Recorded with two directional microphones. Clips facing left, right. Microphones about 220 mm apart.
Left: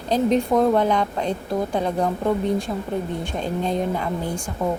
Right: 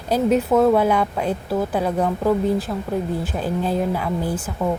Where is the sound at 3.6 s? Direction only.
5° right (ahead or behind).